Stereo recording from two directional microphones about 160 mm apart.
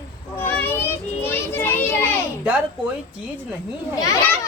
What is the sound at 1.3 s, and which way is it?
Children playing, 15° left (ahead or behind).